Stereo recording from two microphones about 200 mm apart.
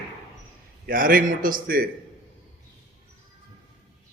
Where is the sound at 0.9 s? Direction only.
45° right (ahead or behind).